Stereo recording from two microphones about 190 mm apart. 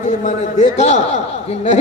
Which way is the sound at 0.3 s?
40° left (ahead or behind).